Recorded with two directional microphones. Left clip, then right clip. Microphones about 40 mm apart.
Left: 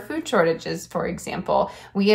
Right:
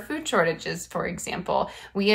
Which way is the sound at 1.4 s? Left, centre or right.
Left.